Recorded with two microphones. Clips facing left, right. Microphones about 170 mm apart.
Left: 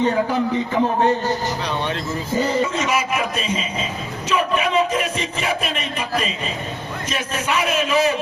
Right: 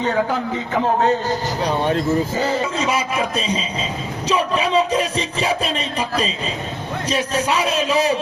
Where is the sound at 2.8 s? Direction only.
30° right (ahead or behind).